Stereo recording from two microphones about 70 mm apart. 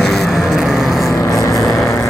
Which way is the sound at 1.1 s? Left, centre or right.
Left.